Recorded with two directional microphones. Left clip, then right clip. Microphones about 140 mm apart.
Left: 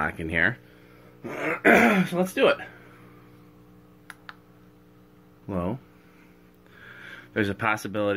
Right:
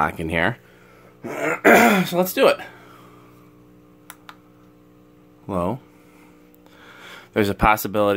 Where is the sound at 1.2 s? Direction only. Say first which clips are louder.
Right 5 dB; 50° right (ahead or behind); by 2.7 s 30° right (ahead or behind).